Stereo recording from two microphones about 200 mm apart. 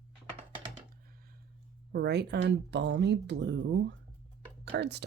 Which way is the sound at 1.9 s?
55° right (ahead or behind).